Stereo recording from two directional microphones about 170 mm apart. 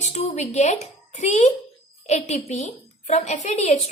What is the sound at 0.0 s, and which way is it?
A woman's voice, 40° left (ahead or behind).